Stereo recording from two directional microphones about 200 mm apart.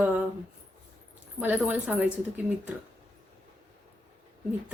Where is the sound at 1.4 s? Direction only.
5° right (ahead or behind).